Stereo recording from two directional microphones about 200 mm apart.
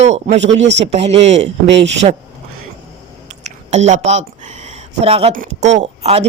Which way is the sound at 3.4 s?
35° right (ahead or behind).